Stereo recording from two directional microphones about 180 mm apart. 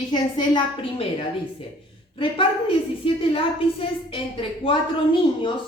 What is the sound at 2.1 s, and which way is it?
A woman's voice, 30° left (ahead or behind).